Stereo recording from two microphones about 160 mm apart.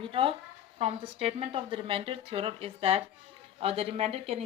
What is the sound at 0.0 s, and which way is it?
Speech, 35° right (ahead or behind).